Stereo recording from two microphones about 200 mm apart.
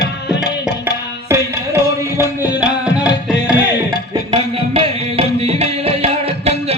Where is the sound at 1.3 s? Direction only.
15° right (ahead or behind).